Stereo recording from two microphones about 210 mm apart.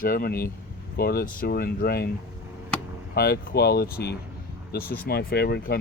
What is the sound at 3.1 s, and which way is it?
Speech, 45° left (ahead or behind).